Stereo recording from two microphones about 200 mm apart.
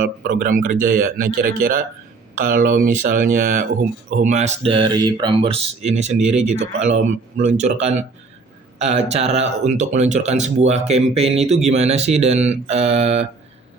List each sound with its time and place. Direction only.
0.0 s speech: 45° right (ahead or behind)